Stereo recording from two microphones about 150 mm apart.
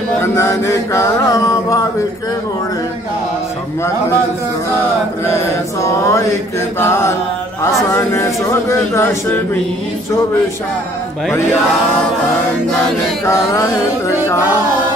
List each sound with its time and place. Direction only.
0.2 s mantra: 20° left (ahead or behind)
5.2 s speech: 20° left (ahead or behind)
6.8 s mantra: 15° left (ahead or behind)
7.6 s speech: 20° left (ahead or behind)
13.2 s speech: 20° left (ahead or behind)